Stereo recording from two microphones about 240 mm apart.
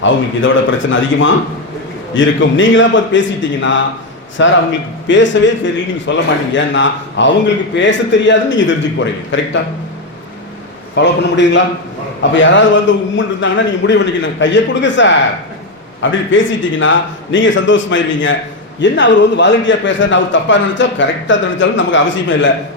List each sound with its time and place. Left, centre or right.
0.0 s a man's voice: left
10.9 s a man's voice: left